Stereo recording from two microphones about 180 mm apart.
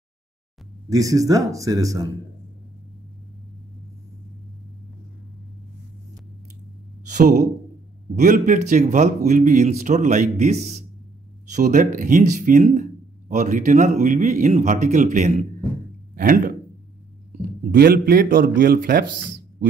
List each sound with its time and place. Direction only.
0.8 s speech: 20° right (ahead or behind)
7.1 s speech: 45° right (ahead or behind)
16.2 s speech: 50° right (ahead or behind)
17.7 s a man's voice: 55° right (ahead or behind)